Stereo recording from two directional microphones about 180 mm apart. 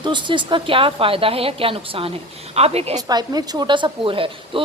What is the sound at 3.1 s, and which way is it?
Speech, 20° right (ahead or behind).